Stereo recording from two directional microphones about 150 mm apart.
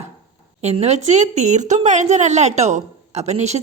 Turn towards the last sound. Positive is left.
turn(degrees=-45)  # may be behind; listen again after turning